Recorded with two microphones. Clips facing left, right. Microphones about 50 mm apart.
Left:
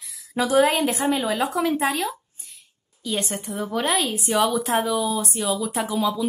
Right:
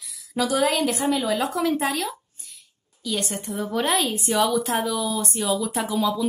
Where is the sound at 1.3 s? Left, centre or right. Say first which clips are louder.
Left 1 dB; centre.